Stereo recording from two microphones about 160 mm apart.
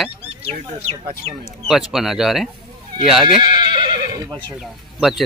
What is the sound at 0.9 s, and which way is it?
Speech, 30° right (ahead or behind).